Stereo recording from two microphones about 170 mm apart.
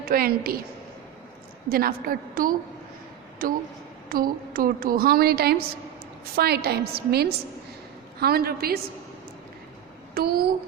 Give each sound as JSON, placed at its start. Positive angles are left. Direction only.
{"t": 0.0, "sound": "a woman's voice", "side_deg": -60}
{"t": 1.7, "sound": "a woman's voice", "side_deg": -60}
{"t": 10.2, "sound": "a woman's voice", "side_deg": -60}